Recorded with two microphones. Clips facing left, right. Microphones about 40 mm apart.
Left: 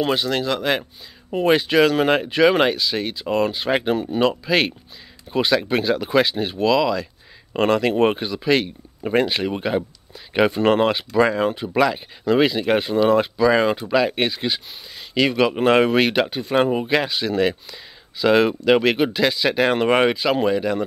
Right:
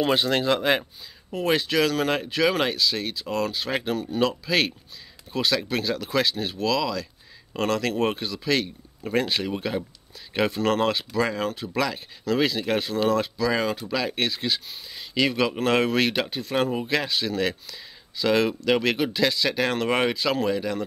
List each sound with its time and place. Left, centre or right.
0.2 s speech: right
0.6 s speech: centre
1.3 s speech: centre